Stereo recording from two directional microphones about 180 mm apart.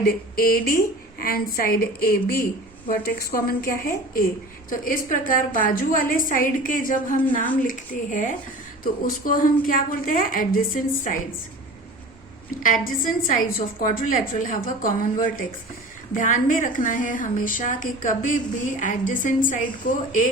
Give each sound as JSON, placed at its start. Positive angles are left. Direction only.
{"t": 0.0, "sound": "a woman's voice", "side_deg": 55}
{"t": 12.5, "sound": "a woman's voice", "side_deg": 50}